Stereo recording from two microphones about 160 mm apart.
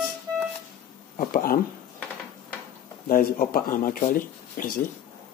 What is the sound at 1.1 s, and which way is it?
Speech, 60° left (ahead or behind).